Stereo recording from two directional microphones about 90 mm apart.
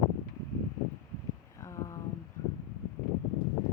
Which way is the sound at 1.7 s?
35° left (ahead or behind).